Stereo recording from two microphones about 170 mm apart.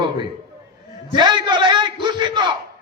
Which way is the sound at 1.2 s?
25° right (ahead or behind).